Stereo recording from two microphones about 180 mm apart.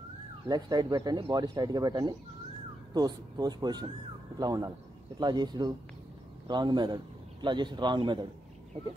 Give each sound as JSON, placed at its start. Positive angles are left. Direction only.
{"t": 0.5, "sound": "speech", "side_deg": -25}